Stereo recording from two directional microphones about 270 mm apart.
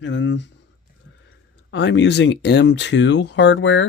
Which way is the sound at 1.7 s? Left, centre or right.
Left.